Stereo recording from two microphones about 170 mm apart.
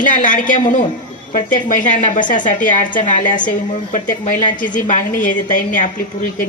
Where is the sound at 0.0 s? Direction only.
50° left (ahead or behind).